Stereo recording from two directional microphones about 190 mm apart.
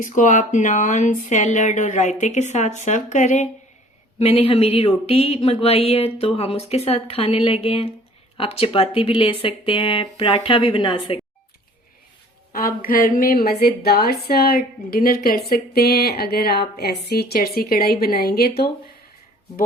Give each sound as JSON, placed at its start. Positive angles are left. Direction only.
{"t": 0.0, "sound": "speech", "side_deg": 40}
{"t": 12.5, "sound": "a woman's voice", "side_deg": 50}